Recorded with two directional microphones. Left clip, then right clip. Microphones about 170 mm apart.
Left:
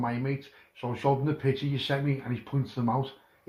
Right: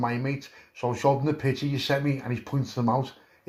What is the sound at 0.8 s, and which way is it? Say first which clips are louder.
Speech: right 4 dB; 35° right (ahead or behind).